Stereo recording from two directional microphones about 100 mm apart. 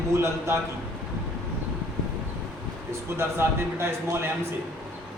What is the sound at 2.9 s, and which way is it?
A man's voice, 25° right (ahead or behind).